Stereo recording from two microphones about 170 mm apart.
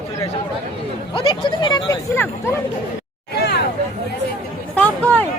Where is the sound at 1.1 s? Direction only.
30° left (ahead or behind).